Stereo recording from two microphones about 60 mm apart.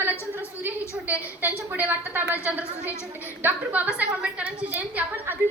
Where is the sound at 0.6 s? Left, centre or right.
Right.